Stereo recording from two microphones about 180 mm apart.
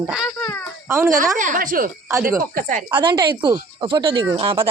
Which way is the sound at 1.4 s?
45° right (ahead or behind).